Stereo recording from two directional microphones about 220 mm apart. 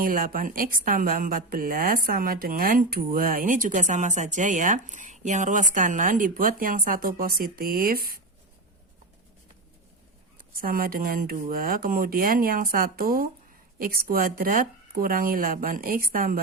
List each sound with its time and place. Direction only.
0.0 s a woman's voice: 40° right (ahead or behind)
10.5 s a woman's voice: 40° right (ahead or behind)